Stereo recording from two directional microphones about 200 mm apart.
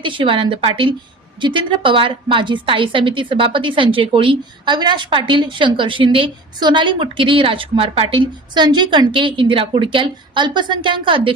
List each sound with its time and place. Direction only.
0.0 s a woman's voice: 25° right (ahead or behind)